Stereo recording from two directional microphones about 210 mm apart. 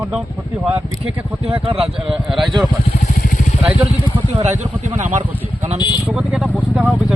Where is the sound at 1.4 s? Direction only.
30° right (ahead or behind).